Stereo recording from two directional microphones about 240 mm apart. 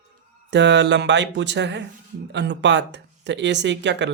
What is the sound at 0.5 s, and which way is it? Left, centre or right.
Speech, right.